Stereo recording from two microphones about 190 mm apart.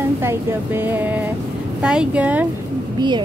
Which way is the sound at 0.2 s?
10° right (ahead or behind).